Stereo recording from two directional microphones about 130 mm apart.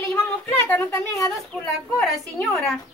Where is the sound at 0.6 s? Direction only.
20° left (ahead or behind).